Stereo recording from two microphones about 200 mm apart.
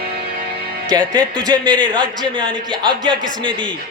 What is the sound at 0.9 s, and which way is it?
Speech, 5° left (ahead or behind).